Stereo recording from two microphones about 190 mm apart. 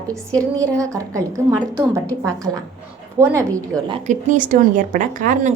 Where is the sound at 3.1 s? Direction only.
15° right (ahead or behind).